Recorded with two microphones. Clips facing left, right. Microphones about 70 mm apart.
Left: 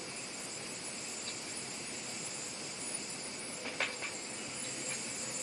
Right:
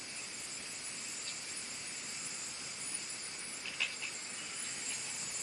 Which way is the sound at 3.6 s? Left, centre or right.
Left.